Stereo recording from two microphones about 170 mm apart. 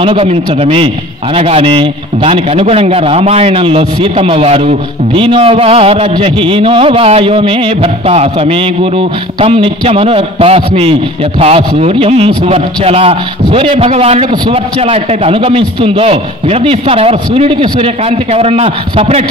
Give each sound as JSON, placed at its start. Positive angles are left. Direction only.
{"t": 0.0, "sound": "a man's voice", "side_deg": -35}